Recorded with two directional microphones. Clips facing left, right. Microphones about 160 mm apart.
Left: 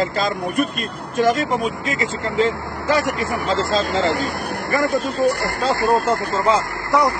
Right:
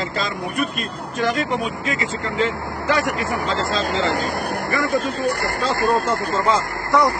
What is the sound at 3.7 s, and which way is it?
Speech, 45° left (ahead or behind).